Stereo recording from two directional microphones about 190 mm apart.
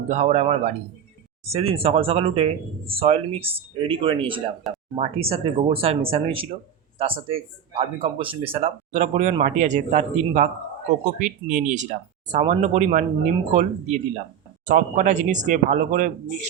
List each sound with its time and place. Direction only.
0.1 s speech: 35° right (ahead or behind)